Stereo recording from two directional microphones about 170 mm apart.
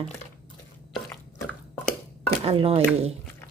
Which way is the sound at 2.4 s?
35° right (ahead or behind).